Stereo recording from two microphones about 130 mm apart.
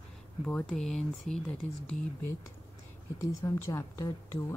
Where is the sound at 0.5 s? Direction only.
5° left (ahead or behind).